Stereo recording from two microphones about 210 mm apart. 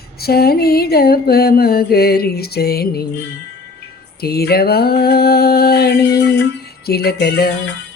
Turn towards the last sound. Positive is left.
turn(degrees=50)  # may be behind; listen again after turning